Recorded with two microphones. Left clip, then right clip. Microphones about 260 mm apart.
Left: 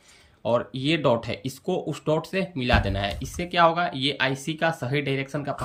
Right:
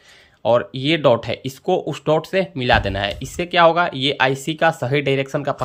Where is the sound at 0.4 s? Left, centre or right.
Centre.